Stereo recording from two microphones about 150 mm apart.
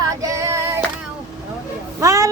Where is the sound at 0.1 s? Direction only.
20° right (ahead or behind).